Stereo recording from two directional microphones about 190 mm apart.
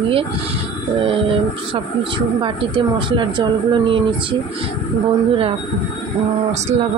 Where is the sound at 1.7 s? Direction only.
25° right (ahead or behind).